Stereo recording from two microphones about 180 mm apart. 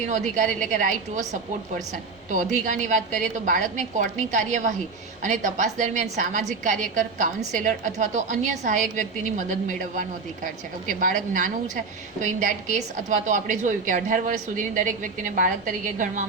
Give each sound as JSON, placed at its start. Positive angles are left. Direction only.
{"t": 0.1, "sound": "a woman's voice", "side_deg": -45}
{"t": 2.3, "sound": "a woman's voice", "side_deg": -45}